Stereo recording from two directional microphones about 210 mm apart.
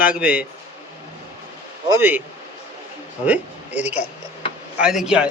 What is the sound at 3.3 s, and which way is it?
A man's voice, 5° right (ahead or behind).